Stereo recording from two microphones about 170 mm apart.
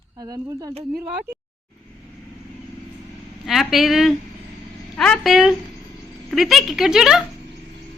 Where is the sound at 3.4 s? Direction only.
Centre (ahead or behind).